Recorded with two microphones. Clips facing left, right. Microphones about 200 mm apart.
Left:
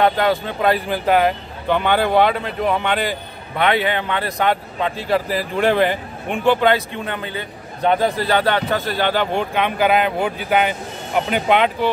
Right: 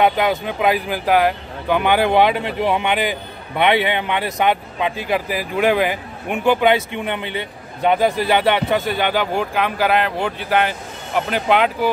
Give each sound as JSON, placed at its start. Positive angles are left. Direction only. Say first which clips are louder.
{"t": 0.0, "sound": "a man's voice", "louder": "even", "side_deg": -15}
{"t": 9.3, "sound": "speech", "louder": "even", "side_deg": 0}